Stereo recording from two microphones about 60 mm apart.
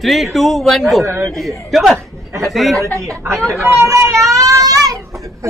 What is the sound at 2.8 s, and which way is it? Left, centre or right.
Speech, right.